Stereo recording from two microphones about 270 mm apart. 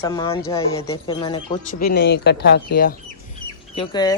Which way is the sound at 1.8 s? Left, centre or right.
Left.